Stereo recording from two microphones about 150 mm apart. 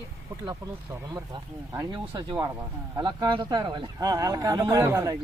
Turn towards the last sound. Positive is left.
turn(degrees=-20)  # may be behind; listen again after turning